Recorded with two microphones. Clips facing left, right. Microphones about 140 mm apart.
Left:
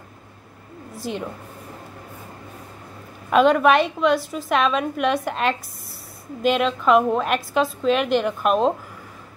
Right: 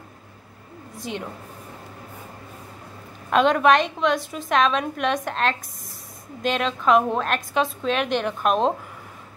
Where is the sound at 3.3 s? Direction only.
5° left (ahead or behind).